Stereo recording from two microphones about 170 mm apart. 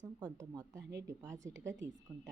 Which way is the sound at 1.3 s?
90° right.